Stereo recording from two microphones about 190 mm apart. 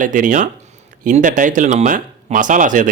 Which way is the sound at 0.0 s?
45° right (ahead or behind).